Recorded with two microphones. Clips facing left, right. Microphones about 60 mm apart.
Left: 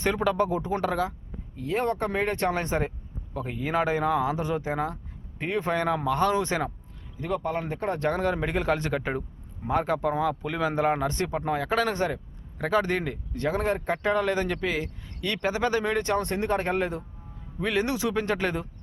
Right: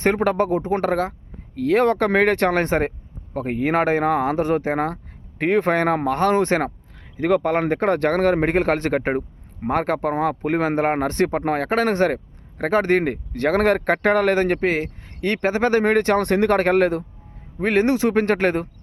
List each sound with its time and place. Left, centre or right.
0.0 s speech: right
1.5 s speech: right
7.0 s speech: right
17.6 s speech: right